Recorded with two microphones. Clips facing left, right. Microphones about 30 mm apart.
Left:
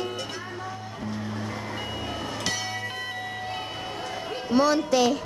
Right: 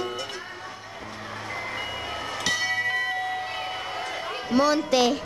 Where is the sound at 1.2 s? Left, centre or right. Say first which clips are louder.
Even; right; by 2.1 s centre.